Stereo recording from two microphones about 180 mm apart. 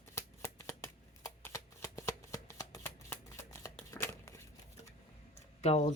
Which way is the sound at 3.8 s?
15° left (ahead or behind).